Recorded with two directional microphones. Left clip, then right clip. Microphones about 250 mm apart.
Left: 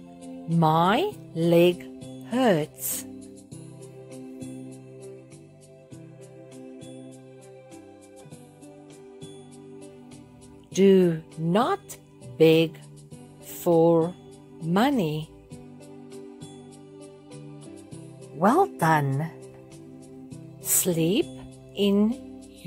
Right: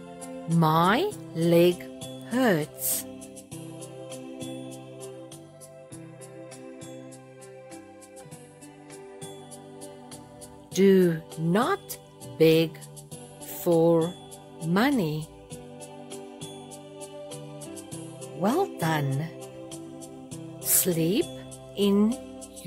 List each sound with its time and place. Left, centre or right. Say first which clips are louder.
0.6 s speech: left 1 dB; centre
10.7 s speech: left 1 dB; centre
13.5 s music: left 2 dB; centre
14.7 s speech: left 1 dB; centre
18.4 s speech: left 5 dB; centre
20.6 s music: left 1 dB; centre